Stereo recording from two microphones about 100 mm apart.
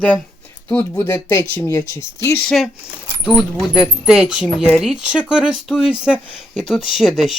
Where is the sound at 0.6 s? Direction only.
30° left (ahead or behind).